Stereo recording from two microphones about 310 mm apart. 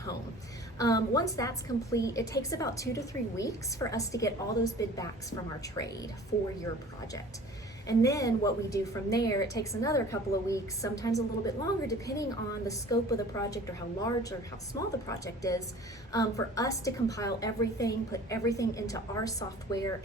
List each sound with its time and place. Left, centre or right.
0.8 s a woman's voice: centre
7.9 s a woman's voice: centre